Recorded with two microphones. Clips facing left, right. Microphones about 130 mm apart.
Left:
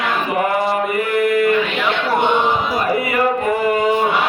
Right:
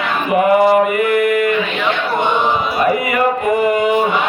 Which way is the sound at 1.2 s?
35° left (ahead or behind).